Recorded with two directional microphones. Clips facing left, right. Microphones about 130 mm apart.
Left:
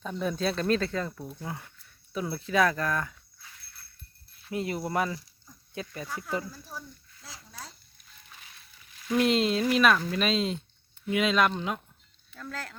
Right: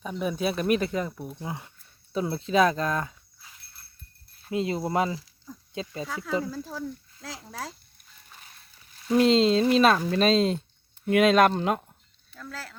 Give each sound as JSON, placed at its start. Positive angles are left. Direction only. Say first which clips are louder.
{"t": 0.0, "sound": "speech", "louder": "right 1 dB", "side_deg": -10}
{"t": 6.5, "sound": "speech", "louder": "right 10 dB", "side_deg": -90}
{"t": 8.4, "sound": "a sound", "louder": "right 1 dB", "side_deg": -40}
{"t": 10.1, "sound": "speech", "louder": "right 6 dB", "side_deg": -35}
{"t": 11.0, "sound": "speech", "louder": "right 6 dB", "side_deg": -50}
{"t": 12.3, "sound": "speech", "louder": "left 1 dB", "side_deg": 0}